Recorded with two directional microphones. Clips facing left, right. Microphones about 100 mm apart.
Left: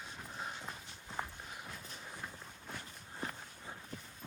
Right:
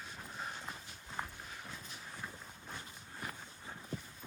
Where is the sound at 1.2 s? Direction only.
Centre (ahead or behind).